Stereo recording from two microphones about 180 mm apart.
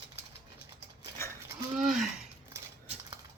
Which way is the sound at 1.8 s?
Centre (ahead or behind).